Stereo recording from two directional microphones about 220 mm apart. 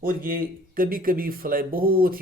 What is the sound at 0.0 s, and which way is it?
Speech, 40° right (ahead or behind).